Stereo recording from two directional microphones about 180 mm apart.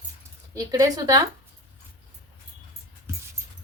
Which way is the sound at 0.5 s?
20° right (ahead or behind).